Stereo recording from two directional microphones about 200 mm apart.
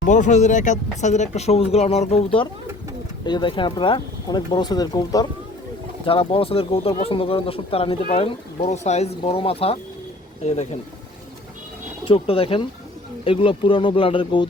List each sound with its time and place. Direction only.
0.0 s speech: 40° left (ahead or behind)
12.0 s speech: 30° left (ahead or behind)